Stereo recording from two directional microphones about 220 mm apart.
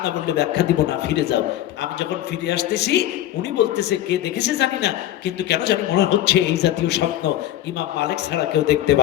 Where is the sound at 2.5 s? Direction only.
50° left (ahead or behind).